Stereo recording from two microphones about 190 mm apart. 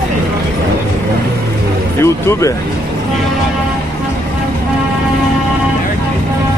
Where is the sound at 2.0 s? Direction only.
15° left (ahead or behind).